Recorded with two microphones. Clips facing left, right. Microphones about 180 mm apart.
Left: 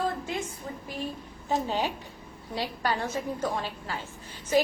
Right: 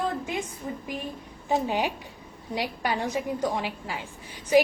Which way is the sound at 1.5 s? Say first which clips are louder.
Right 2 dB; 15° right (ahead or behind).